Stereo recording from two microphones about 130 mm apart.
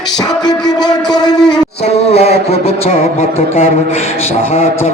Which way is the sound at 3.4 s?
50° left (ahead or behind).